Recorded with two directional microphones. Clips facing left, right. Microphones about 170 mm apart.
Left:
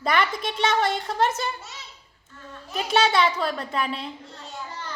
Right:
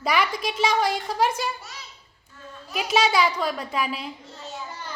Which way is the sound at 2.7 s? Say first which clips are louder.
Even; 5° right (ahead or behind).